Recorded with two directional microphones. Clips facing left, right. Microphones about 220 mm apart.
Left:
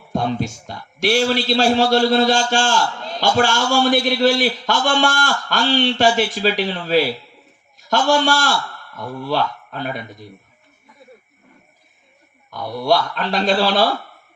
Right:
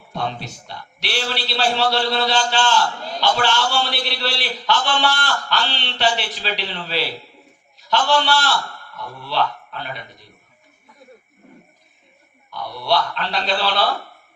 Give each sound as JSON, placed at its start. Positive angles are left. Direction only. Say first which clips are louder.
{"t": 0.1, "sound": "a man's voice", "louder": "left 6 dB", "side_deg": 45}
{"t": 7.8, "sound": "a sound", "louder": "left 3 dB", "side_deg": 45}
{"t": 8.2, "sound": "a man's voice", "louder": "left 2 dB", "side_deg": 45}
{"t": 12.5, "sound": "a man's voice", "louder": "left 4 dB", "side_deg": 45}